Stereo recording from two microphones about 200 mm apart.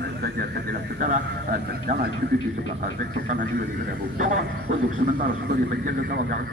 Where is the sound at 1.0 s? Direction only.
45° right (ahead or behind).